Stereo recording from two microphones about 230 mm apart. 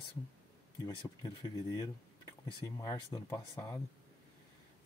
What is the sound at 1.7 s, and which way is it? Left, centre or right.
Speech, centre.